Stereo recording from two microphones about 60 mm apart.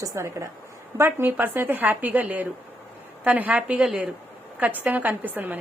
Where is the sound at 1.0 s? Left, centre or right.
Right; by 4.1 s centre.